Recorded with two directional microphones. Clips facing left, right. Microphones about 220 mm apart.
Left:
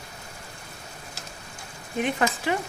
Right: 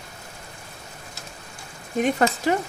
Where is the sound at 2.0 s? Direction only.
40° right (ahead or behind).